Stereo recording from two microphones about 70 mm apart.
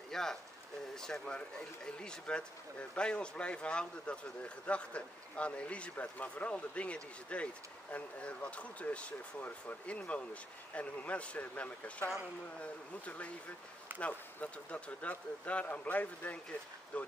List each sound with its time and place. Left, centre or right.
0.1 s a man's voice: centre
13.9 s speech: centre